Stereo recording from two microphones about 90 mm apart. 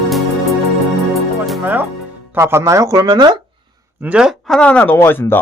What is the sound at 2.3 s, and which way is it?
Speech, 30° right (ahead or behind).